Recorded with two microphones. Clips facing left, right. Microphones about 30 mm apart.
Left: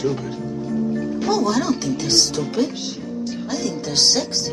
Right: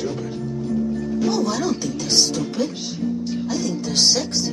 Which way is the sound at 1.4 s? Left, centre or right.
Centre.